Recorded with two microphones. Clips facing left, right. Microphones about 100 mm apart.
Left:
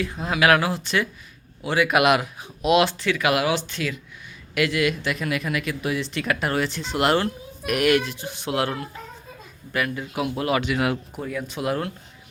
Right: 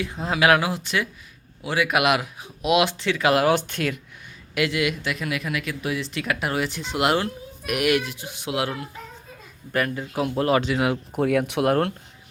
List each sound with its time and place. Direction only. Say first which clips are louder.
0.0 s speech: even; 20° right (ahead or behind)
3.0 s speech: right 1 dB; 30° right (ahead or behind)
3.4 s speech: right 3 dB; 50° right (ahead or behind)
4.5 s speech: left 1 dB; 20° right (ahead or behind)
5.0 s speech: left 2 dB; centre (ahead or behind)
9.7 s speech: right 1 dB; 35° right (ahead or behind)
11.2 s speech: right 8 dB; 70° right (ahead or behind)